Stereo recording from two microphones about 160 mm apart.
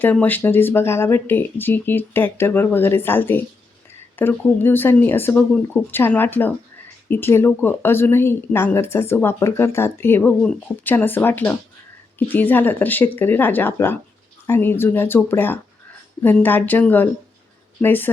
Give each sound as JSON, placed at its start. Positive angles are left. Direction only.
{"t": 0.0, "sound": "speech", "side_deg": 10}